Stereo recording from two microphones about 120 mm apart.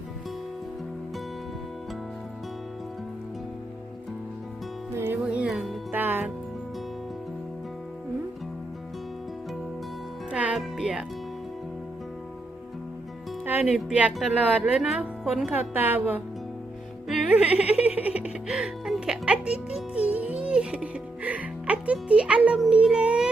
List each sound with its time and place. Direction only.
4.9 s music: 20° right (ahead or behind)
10.3 s music: 10° right (ahead or behind)
13.4 s speech: 15° right (ahead or behind)
17.1 s music: 5° right (ahead or behind)